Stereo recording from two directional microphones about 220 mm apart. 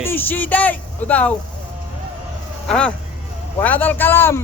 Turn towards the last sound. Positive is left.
turn(degrees=10)  # may be behind; listen again after turning